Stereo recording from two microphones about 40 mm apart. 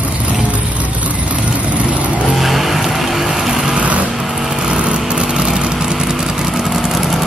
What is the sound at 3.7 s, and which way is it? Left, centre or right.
Vehicle, right.